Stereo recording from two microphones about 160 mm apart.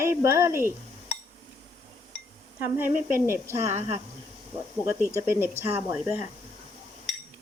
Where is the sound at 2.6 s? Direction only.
15° right (ahead or behind).